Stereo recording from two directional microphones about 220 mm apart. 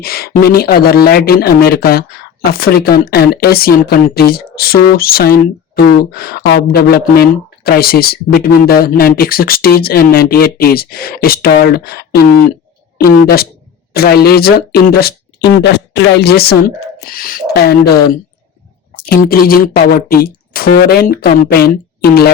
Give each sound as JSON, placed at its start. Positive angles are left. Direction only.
{"t": 0.0, "sound": "speech", "side_deg": 45}